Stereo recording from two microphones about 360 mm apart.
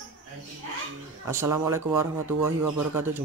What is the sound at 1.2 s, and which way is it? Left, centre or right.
Speech, centre.